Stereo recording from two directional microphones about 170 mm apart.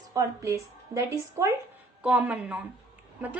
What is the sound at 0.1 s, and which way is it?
A woman's voice, 20° right (ahead or behind).